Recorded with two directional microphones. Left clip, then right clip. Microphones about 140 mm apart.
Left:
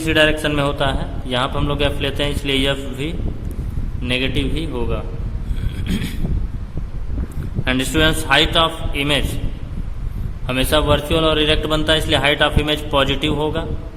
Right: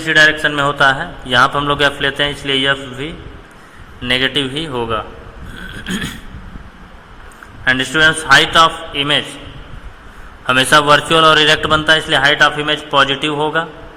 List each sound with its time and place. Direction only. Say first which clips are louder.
0.0 s a man's voice: right 5 dB; 25° left (ahead or behind)
0.7 s a man's voice: right 8 dB; 10° left (ahead or behind); by 3.2 s 25° left (ahead or behind)
4.0 s a man's voice: right 6 dB; 10° left (ahead or behind)
5.8 s a sound: right 4 dB; 15° left (ahead or behind)
7.6 s a man's voice: right 6 dB; 25° left (ahead or behind)
10.4 s a man's voice: right 7 dB; 10° left (ahead or behind)